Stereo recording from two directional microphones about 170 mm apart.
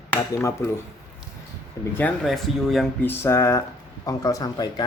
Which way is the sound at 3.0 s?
15° left (ahead or behind).